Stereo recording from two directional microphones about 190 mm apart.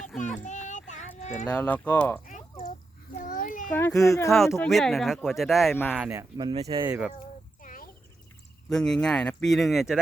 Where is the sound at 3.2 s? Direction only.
45° left (ahead or behind).